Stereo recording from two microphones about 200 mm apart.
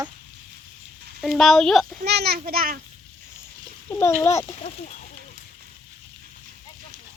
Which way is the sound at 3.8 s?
10° left (ahead or behind).